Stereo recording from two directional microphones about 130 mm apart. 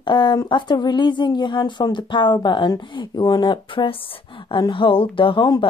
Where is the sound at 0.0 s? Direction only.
35° left (ahead or behind).